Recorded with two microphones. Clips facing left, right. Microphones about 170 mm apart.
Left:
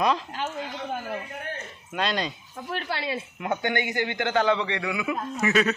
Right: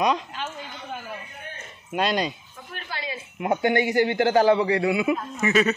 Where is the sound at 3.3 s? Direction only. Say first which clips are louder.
Right 7 dB; 30° right (ahead or behind).